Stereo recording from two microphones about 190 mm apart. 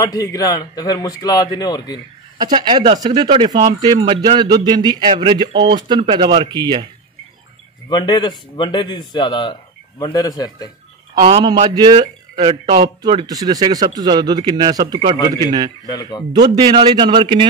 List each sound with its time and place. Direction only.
0.0 s a man's voice: 20° left (ahead or behind)
2.3 s speech: 25° right (ahead or behind)
7.9 s a man's voice: 25° left (ahead or behind)
11.1 s speech: 25° right (ahead or behind)
15.8 s a man's voice: 20° left (ahead or behind)
16.3 s speech: 20° right (ahead or behind)